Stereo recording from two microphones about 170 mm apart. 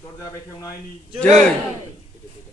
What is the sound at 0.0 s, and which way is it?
Speech, 20° left (ahead or behind).